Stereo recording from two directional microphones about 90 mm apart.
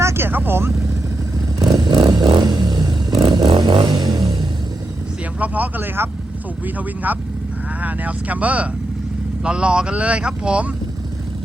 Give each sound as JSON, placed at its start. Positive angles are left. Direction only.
{"t": 0.0, "sound": "vehicle", "side_deg": -25}
{"t": 1.7, "sound": "vehicle", "side_deg": -45}
{"t": 3.2, "sound": "vehicle", "side_deg": -65}
{"t": 5.4, "sound": "speech", "side_deg": -20}